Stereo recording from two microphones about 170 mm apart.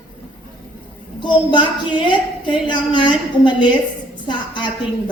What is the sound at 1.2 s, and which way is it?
A woman's voice, 25° left (ahead or behind).